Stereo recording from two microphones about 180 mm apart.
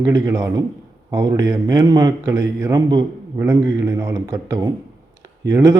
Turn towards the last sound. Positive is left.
turn(degrees=-20)  # may be behind; listen again after turning